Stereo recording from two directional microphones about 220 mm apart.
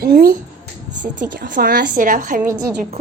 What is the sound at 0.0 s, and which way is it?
A woman's voice, 45° right (ahead or behind).